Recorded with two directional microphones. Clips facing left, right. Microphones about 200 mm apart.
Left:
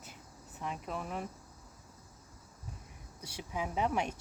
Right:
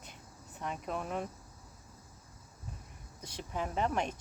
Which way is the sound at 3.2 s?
10° left (ahead or behind).